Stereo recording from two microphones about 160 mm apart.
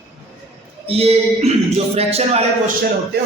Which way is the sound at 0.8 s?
40° right (ahead or behind).